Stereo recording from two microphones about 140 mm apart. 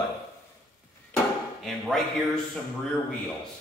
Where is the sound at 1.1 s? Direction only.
Centre (ahead or behind).